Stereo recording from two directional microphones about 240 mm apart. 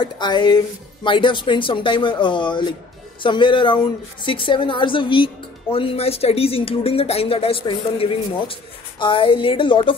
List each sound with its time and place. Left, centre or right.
0.0 s a woman's voice: centre